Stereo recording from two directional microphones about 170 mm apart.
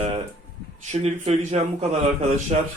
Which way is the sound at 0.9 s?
40° right (ahead or behind).